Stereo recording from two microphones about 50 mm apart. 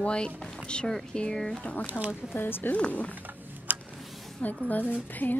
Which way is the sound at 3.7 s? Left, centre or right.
Right.